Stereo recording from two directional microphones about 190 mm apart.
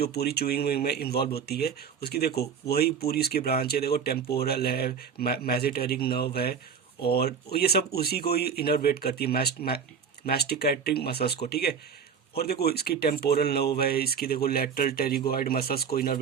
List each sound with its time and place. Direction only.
0.0 s speech: 55° left (ahead or behind)